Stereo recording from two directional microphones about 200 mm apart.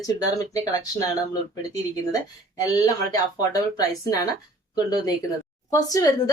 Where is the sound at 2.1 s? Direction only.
15° left (ahead or behind).